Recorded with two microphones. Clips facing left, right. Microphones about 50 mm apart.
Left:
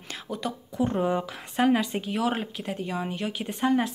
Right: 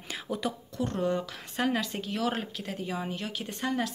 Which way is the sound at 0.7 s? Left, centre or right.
Centre.